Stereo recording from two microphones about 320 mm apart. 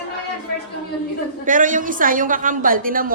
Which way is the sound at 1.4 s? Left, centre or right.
Right.